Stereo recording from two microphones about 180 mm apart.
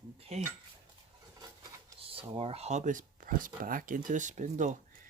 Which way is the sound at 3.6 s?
50° right (ahead or behind).